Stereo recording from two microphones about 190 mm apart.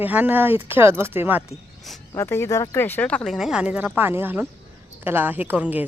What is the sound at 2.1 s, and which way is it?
Speech, 15° left (ahead or behind).